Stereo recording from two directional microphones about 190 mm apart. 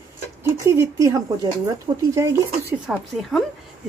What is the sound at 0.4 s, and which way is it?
Speech, 15° right (ahead or behind).